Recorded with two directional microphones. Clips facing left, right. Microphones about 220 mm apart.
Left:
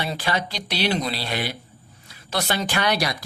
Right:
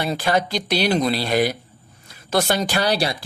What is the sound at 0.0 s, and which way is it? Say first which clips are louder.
Speech: right 5 dB; 45° right (ahead or behind).